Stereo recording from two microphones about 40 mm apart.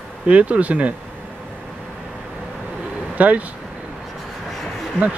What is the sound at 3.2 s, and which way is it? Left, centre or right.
Speech, right.